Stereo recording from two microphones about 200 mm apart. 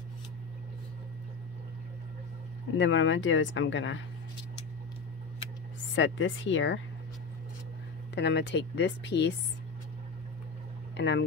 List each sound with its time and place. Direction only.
2.8 s speech: 70° left (ahead or behind)
5.9 s speech: 65° left (ahead or behind)
8.1 s speech: 60° left (ahead or behind)
11.0 s speech: 60° left (ahead or behind)